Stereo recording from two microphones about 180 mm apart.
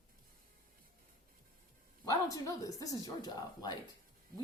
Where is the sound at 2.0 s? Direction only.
20° left (ahead or behind).